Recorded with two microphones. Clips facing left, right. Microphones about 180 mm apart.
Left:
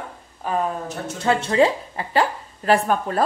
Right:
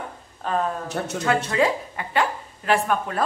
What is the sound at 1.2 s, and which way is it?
Speech, 30° left (ahead or behind).